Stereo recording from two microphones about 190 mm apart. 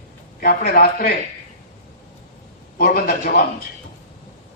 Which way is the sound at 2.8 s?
50° left (ahead or behind).